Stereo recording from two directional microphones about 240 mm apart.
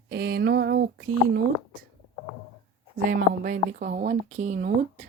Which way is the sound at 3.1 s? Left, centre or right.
Right.